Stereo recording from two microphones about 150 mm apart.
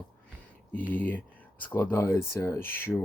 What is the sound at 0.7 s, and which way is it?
Speech, 10° left (ahead or behind).